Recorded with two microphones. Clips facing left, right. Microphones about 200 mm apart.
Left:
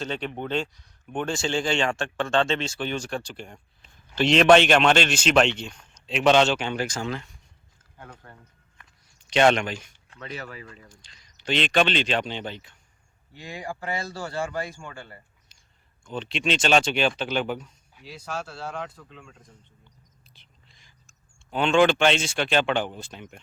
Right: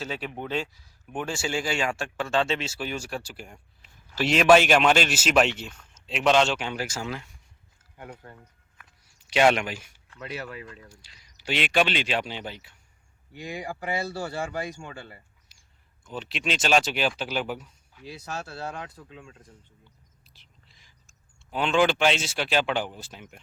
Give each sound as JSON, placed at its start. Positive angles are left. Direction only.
{"t": 0.0, "sound": "a man's voice", "side_deg": -5}
{"t": 8.8, "sound": "a sound", "side_deg": -5}
{"t": 10.2, "sound": "speech", "side_deg": -5}
{"t": 16.0, "sound": "a man's voice", "side_deg": -5}
{"t": 18.9, "sound": "speech", "side_deg": -35}
{"t": 20.3, "sound": "whispering", "side_deg": -5}